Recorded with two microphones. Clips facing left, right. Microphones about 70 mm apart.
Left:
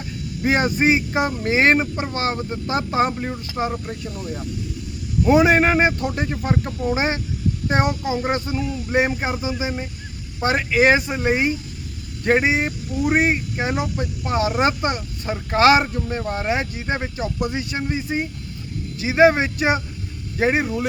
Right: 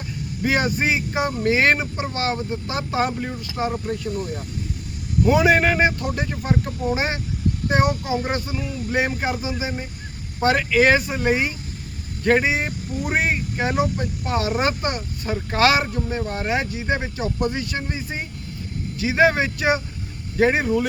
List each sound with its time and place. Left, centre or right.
0.4 s speech: left
5.3 s speech: left
14.3 s speech: left